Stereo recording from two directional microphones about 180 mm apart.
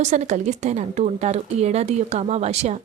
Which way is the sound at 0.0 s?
40° right (ahead or behind).